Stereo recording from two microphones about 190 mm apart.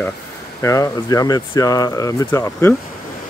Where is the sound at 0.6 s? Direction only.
15° left (ahead or behind).